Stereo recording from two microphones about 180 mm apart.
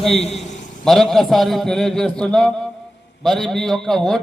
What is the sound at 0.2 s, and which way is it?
Speech, 35° left (ahead or behind).